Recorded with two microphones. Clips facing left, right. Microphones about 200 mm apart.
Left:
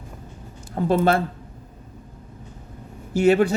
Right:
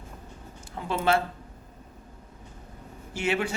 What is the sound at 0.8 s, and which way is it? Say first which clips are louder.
Speech: left 6 dB; 40° left (ahead or behind).